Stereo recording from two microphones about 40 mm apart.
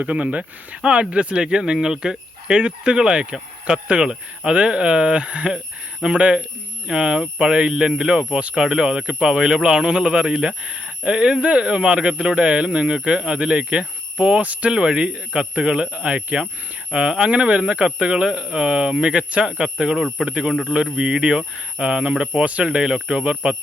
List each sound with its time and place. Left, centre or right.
0.0 s speech: right
14.7 s speech: right